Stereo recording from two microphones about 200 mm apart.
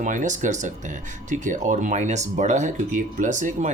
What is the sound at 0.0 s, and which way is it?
Speech, 40° right (ahead or behind).